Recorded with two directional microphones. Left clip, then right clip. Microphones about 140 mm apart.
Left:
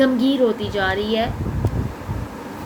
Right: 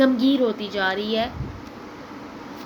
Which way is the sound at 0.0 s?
60° right (ahead or behind).